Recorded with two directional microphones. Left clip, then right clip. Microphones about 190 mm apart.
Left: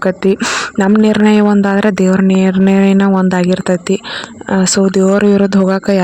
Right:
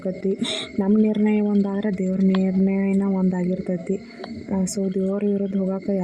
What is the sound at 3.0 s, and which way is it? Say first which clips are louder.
Speech: left 12 dB; 40° left (ahead or behind).